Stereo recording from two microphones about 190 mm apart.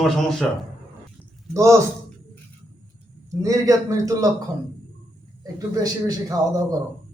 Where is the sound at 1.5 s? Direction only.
15° right (ahead or behind).